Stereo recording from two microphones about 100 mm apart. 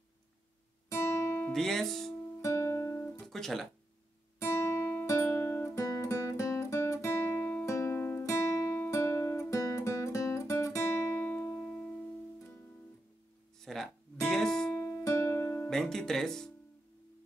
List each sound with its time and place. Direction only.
0.8 s guitar: 30° left (ahead or behind)
1.5 s music: 5° left (ahead or behind)
2.4 s music: 30° left (ahead or behind)
3.3 s guitar: 5° left (ahead or behind)
4.4 s guitar: 30° left (ahead or behind)
5.0 s music: 30° left (ahead or behind); by 12.0 s 10° left (ahead or behind)
13.6 s guitar: 5° left (ahead or behind)
14.8 s music: 20° left (ahead or behind)
15.7 s music: 5° left (ahead or behind)